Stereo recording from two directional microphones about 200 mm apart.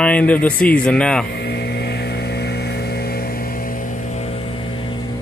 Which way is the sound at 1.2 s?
55° left (ahead or behind).